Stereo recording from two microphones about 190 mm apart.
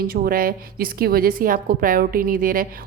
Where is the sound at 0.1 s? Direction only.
50° right (ahead or behind).